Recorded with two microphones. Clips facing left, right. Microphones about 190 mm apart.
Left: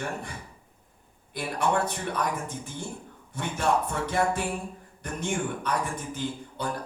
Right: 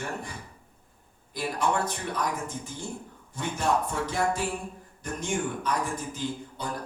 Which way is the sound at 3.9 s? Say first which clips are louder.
Left 1 dB; 60° left (ahead or behind).